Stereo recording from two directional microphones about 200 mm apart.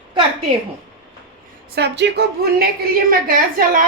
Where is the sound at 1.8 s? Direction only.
60° right (ahead or behind).